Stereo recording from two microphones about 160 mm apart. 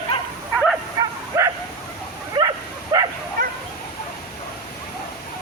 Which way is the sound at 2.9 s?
25° right (ahead or behind).